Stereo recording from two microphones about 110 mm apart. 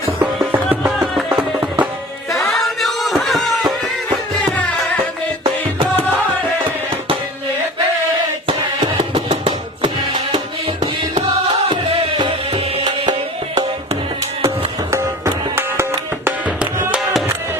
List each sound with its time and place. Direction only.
0.2 s music: 15° right (ahead or behind)
2.3 s music: 25° left (ahead or behind)
2.6 s a sound: centre (ahead or behind)
11.7 s music: 50° right (ahead or behind)
14.4 s music: 25° right (ahead or behind)